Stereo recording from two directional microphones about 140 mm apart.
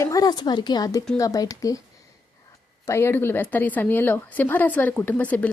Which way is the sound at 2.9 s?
20° left (ahead or behind).